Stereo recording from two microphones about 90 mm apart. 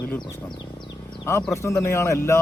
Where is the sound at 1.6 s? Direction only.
30° left (ahead or behind).